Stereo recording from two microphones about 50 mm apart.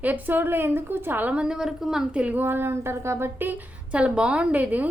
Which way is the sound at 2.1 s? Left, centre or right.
Right.